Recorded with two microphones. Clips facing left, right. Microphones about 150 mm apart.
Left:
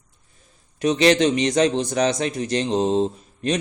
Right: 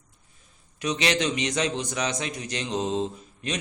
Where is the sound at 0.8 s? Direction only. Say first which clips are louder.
Left 9 dB; 40° left (ahead or behind).